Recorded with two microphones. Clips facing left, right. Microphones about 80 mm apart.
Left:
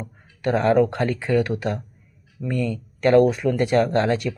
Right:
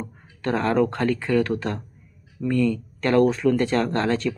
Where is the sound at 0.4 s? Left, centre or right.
Left.